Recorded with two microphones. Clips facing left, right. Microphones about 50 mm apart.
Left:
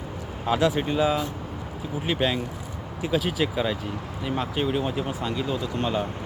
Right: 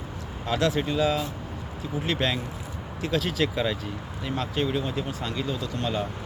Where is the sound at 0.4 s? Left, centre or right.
Centre.